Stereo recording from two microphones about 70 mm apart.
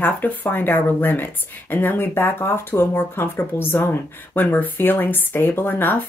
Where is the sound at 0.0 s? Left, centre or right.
Left.